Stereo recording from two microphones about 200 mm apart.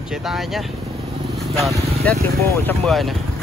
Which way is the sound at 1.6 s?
Centre (ahead or behind).